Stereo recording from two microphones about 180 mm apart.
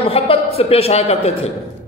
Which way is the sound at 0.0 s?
30° left (ahead or behind).